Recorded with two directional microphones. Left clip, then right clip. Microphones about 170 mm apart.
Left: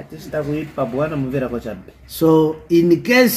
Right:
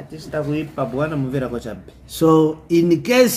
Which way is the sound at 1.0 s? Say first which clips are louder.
Left 1 dB; 15° left (ahead or behind).